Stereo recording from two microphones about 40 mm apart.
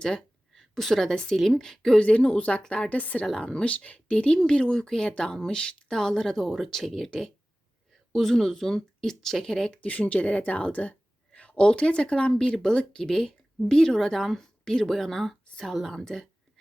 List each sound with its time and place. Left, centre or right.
0.0 s a sound: centre
1.4 s speech: centre
2.0 s speech: left
3.0 s a woman's voice: left
4.4 s speech: left
9.8 s a woman's voice: left
12.5 s speech: centre